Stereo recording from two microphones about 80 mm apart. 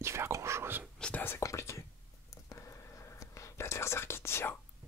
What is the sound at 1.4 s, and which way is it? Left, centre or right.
Whispering, left.